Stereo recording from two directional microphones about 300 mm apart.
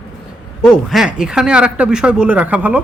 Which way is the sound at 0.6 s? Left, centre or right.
Centre.